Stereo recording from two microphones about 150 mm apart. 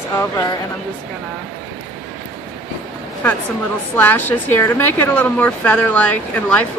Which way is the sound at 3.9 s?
15° left (ahead or behind).